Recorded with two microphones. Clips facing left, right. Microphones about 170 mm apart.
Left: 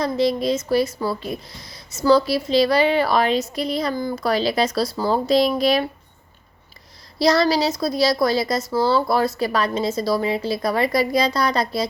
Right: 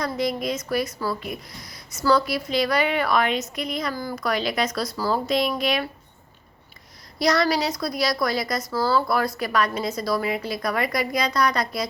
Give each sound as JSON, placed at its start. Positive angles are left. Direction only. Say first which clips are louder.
{"t": 0.0, "sound": "a woman's voice", "louder": "left 5 dB", "side_deg": 30}
{"t": 7.2, "sound": "a woman's voice", "louder": "left 4 dB", "side_deg": 30}